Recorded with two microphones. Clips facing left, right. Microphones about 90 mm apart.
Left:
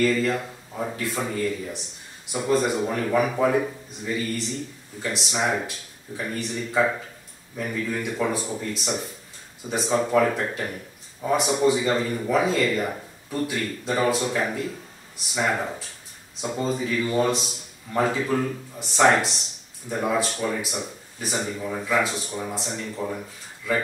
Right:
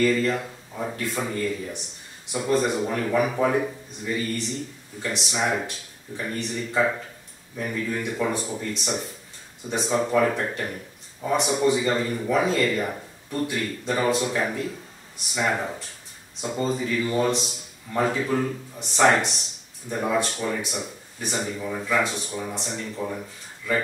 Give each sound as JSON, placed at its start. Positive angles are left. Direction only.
{"t": 0.0, "sound": "a man's voice", "side_deg": 5}